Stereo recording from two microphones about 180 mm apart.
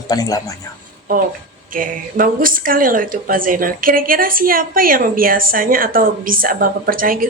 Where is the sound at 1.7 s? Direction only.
50° right (ahead or behind).